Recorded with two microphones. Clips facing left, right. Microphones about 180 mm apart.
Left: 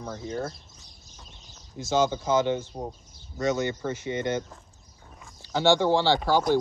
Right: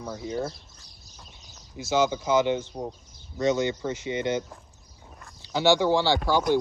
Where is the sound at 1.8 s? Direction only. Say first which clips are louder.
Even; 10° right (ahead or behind).